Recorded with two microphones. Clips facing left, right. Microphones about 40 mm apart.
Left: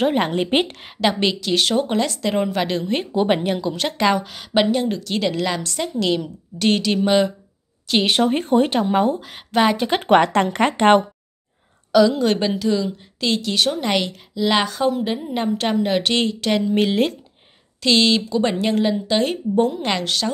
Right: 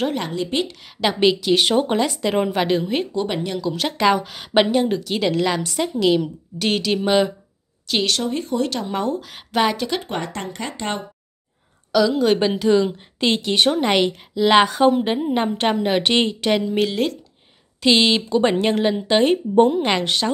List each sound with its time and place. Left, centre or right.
0.3 s speech: left
1.0 s a woman's voice: centre
3.1 s speech: left
3.7 s a woman's voice: centre
8.0 s speech: left
8.8 s a woman's voice: centre
10.0 s speech: left
11.9 s a woman's voice: centre
12.5 s a woman's voice: right
16.8 s speech: centre
17.8 s a woman's voice: centre
19.5 s a woman's voice: right
19.8 s a woman's voice: centre